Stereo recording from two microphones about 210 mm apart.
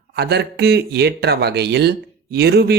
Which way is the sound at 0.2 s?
50° right (ahead or behind).